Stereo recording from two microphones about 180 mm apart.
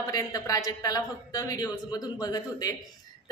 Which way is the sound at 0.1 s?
20° left (ahead or behind).